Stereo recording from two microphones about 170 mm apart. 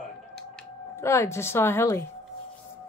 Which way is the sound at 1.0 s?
15° left (ahead or behind).